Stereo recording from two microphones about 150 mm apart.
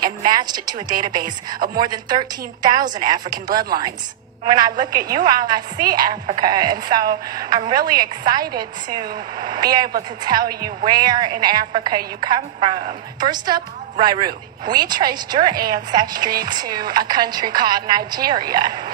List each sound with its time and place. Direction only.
0.0 s a woman's voice: 25° right (ahead or behind)